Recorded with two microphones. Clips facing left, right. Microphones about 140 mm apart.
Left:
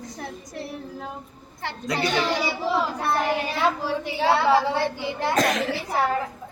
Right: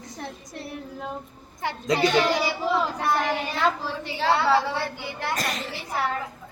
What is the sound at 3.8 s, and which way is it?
A woman's voice, 10° left (ahead or behind).